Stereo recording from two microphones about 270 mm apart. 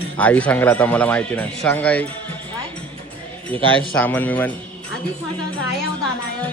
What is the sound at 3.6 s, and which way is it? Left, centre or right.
Speech, centre.